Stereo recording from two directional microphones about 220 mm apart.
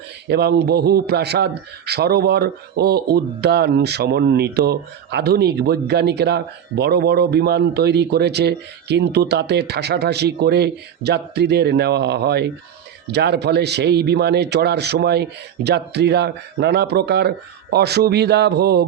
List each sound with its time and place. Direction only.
0.3 s speech: 50° right (ahead or behind)